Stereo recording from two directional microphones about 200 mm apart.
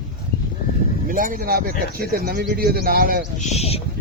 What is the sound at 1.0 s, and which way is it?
Speech, 45° right (ahead or behind).